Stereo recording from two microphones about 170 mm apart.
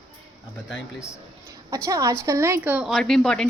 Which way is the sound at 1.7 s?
15° right (ahead or behind).